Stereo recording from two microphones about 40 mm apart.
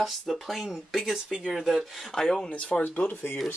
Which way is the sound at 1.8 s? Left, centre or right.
Centre.